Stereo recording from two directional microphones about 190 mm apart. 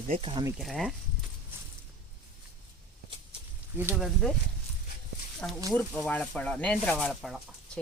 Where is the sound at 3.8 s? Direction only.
10° right (ahead or behind).